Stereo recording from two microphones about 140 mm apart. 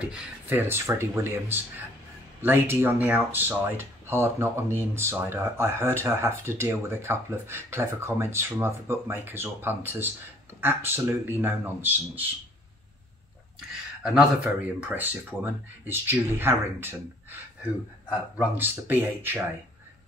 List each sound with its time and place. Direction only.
0.0 s speech: 10° right (ahead or behind)
14.0 s speech: 5° right (ahead or behind)
18.5 s speech: 15° right (ahead or behind)